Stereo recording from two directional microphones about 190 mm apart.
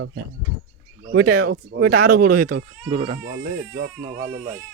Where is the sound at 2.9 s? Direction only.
30° right (ahead or behind).